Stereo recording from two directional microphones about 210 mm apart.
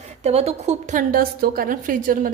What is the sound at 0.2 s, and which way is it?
A woman's voice, 30° right (ahead or behind).